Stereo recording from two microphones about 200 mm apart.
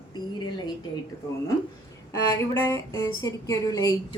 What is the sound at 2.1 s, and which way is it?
Speech, 10° left (ahead or behind).